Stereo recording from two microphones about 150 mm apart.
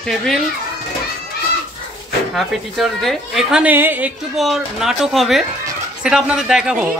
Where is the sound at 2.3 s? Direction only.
Centre (ahead or behind).